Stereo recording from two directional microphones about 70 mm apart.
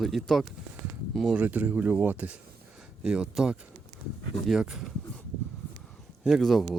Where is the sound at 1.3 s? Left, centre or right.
Centre.